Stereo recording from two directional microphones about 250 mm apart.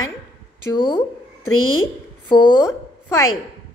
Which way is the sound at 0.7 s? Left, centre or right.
Centre.